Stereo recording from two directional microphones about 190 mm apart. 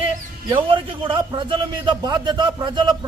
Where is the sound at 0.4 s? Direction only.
25° right (ahead or behind).